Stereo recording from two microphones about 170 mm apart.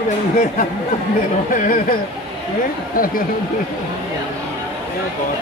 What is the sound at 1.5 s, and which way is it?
Speech, 55° left (ahead or behind).